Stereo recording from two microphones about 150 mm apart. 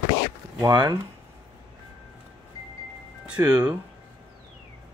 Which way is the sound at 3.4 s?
20° right (ahead or behind).